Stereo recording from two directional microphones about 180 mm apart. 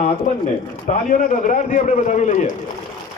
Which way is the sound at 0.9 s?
45° left (ahead or behind).